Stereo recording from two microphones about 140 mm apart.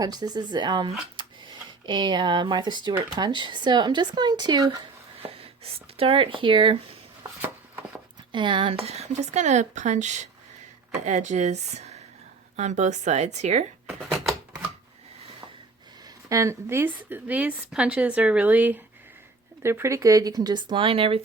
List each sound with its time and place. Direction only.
0.0 s speech: 30° right (ahead or behind)
5.4 s speech: 45° right (ahead or behind)
8.3 s a woman's voice: 35° right (ahead or behind); by 13.7 s 55° right (ahead or behind)
16.3 s a woman's voice: 20° right (ahead or behind); by 21.2 s 40° right (ahead or behind)